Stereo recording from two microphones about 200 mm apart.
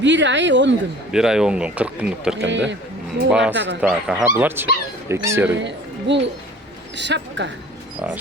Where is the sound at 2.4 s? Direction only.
65° right (ahead or behind).